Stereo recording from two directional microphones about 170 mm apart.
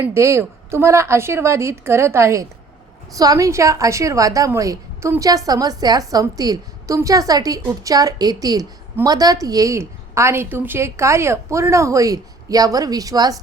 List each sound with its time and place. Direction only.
0.0 s a woman's voice: 15° right (ahead or behind)